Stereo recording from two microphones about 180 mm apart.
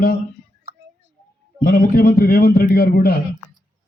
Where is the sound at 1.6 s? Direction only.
50° left (ahead or behind).